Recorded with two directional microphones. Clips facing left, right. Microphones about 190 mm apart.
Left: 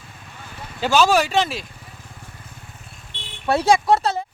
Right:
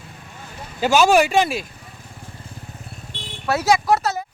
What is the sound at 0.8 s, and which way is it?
Speech, 10° right (ahead or behind).